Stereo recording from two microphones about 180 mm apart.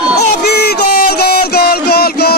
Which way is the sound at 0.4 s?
60° left (ahead or behind).